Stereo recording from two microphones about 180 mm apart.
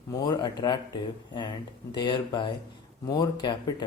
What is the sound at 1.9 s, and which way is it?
Speech, 25° left (ahead or behind).